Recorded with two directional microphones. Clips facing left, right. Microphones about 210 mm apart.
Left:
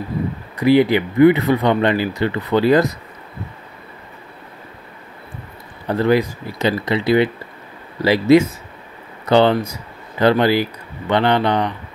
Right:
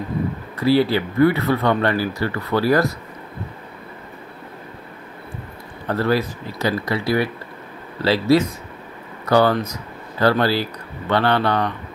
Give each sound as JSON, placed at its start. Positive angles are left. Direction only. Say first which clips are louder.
{"t": 0.6, "sound": "speech", "louder": "left 3 dB", "side_deg": 20}
{"t": 5.9, "sound": "speech", "louder": "left 4 dB", "side_deg": 15}